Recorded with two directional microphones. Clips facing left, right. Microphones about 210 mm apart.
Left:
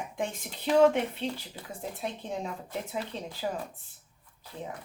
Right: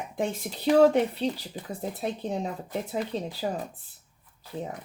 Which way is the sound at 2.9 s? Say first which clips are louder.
Right 5 dB; 35° right (ahead or behind).